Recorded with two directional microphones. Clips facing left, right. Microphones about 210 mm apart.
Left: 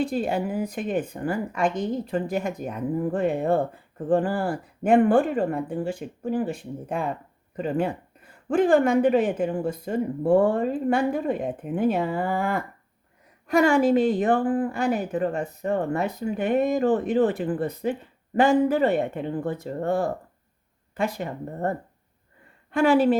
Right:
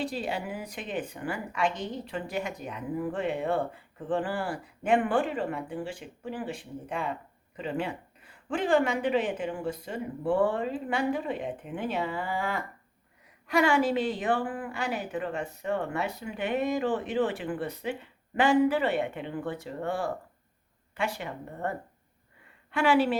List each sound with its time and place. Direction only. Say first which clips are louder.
0.0 s a woman's voice: left 7 dB; 50° left (ahead or behind)